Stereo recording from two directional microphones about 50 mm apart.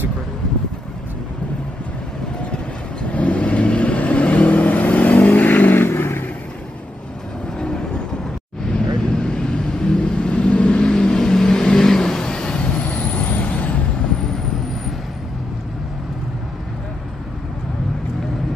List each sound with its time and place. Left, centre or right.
2.5 s vehicle: left
7.5 s vehicle: centre; by 13.7 s left